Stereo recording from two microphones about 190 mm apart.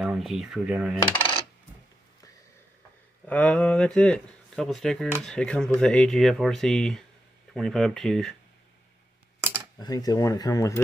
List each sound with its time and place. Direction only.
0.0 s speech: centre (ahead or behind)
3.3 s speech: 5° left (ahead or behind)
9.8 s speech: 20° left (ahead or behind)